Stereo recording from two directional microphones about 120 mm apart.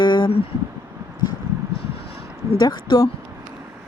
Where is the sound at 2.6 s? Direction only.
35° left (ahead or behind).